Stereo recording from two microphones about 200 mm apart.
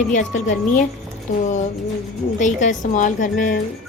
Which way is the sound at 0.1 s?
40° left (ahead or behind).